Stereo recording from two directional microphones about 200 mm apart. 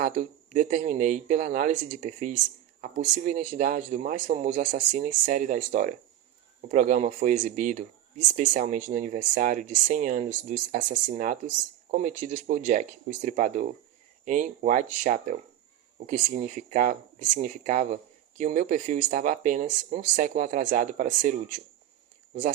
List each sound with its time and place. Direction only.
0.0 s speech: 40° right (ahead or behind)